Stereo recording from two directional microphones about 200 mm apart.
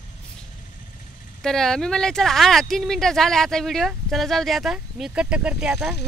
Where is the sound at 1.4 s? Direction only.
Centre (ahead or behind).